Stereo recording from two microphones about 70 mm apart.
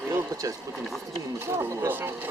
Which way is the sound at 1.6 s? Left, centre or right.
Right.